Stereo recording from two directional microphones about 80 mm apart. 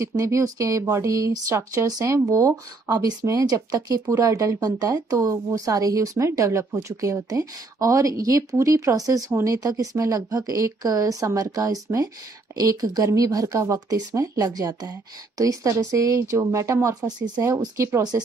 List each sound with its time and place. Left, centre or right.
0.2 s speech: right
3.3 s speech: right
17.6 s speech: right